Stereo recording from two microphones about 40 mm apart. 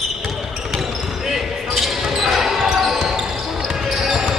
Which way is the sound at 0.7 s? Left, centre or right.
Centre.